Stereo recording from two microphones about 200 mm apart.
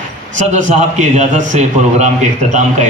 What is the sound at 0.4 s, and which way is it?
A man's voice, 35° right (ahead or behind).